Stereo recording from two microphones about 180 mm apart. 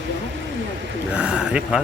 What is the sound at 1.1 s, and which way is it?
Speech, 5° right (ahead or behind).